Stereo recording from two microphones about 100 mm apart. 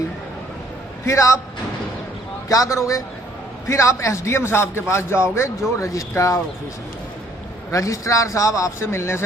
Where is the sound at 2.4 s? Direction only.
35° left (ahead or behind).